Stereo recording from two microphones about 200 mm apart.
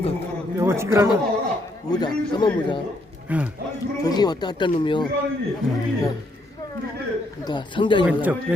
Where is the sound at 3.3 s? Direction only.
10° right (ahead or behind).